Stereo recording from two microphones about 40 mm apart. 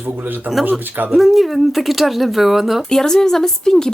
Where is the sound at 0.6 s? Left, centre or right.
Right.